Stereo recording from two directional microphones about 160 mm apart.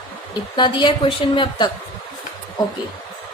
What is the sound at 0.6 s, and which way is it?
A woman's voice, 30° left (ahead or behind).